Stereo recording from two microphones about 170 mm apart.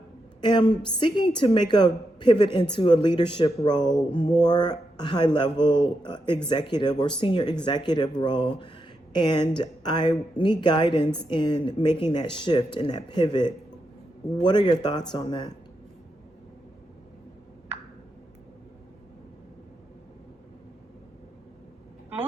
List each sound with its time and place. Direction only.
0.4 s a woman's voice: 25° left (ahead or behind)